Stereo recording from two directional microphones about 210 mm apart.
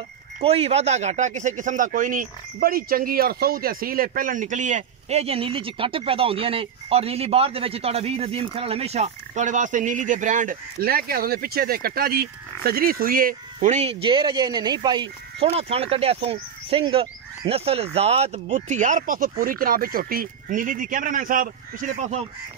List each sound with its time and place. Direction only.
0.4 s speech: 30° right (ahead or behind)